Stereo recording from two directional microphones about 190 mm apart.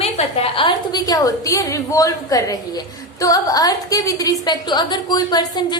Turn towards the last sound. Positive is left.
turn(degrees=20)  # may be behind; listen again after turning